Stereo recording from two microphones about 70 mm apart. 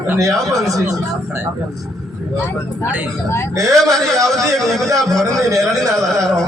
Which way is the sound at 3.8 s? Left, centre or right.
Right.